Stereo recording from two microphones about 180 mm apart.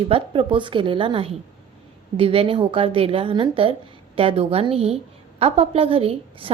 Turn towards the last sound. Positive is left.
turn(degrees=-30)  # may be behind; listen again after turning